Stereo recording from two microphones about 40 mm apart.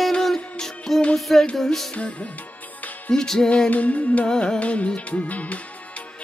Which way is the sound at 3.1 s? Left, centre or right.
Centre.